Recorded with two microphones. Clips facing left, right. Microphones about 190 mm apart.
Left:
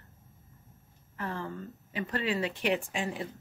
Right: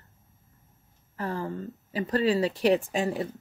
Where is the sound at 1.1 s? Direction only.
35° right (ahead or behind).